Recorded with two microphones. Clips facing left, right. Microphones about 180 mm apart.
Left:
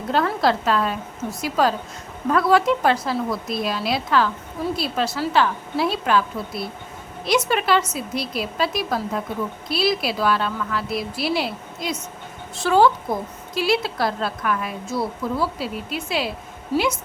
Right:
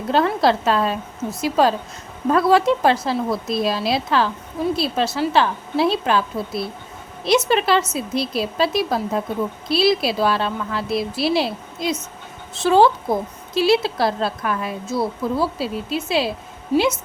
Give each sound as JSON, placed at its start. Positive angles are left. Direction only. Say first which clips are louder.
{"t": 0.1, "sound": "a woman's voice", "louder": "right 3 dB", "side_deg": -25}